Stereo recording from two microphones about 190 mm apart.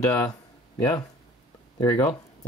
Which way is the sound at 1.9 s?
15° left (ahead or behind).